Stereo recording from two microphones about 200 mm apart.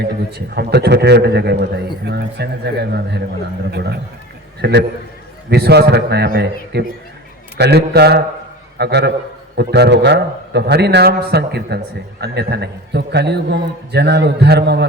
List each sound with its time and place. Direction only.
0.0 s a man's voice: 55° right (ahead or behind)